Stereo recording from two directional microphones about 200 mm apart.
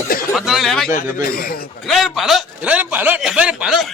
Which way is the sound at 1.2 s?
45° left (ahead or behind).